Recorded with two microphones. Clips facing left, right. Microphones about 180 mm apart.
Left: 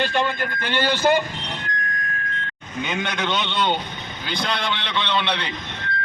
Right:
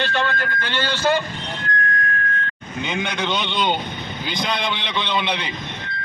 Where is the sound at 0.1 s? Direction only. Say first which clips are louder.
Even; 15° left (ahead or behind).